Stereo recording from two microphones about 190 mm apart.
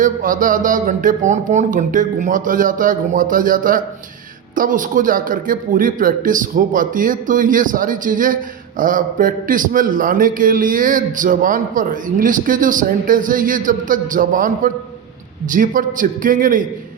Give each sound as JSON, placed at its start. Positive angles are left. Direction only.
{"t": 0.0, "sound": "a man's voice", "side_deg": -45}